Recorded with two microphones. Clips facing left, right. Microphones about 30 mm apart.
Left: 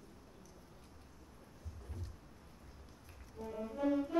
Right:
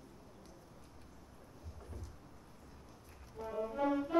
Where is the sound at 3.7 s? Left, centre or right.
Right.